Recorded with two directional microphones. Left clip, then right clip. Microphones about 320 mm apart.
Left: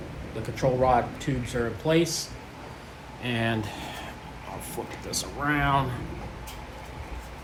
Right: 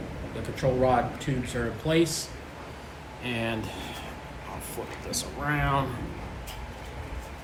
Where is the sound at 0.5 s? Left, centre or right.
Centre.